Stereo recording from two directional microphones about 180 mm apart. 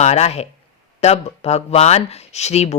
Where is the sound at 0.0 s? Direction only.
35° left (ahead or behind).